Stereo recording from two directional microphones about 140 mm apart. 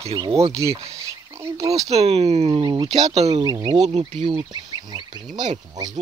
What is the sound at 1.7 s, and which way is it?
Speech, 45° right (ahead or behind).